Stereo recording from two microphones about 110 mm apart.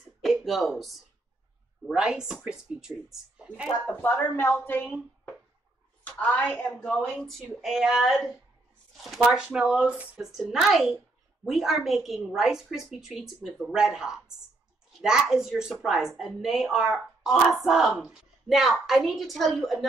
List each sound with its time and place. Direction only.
0.2 s a sound: centre (ahead or behind)
1.9 s a woman's voice: 5° right (ahead or behind)
3.8 s speech: 15° left (ahead or behind)
6.0 s a woman's voice: 15° left (ahead or behind)